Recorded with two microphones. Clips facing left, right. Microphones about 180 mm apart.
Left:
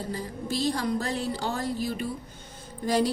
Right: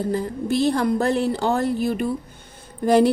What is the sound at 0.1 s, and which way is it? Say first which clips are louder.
A woman's voice: right 9 dB; 60° right (ahead or behind).